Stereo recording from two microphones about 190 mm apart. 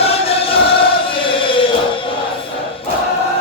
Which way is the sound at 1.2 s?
25° left (ahead or behind).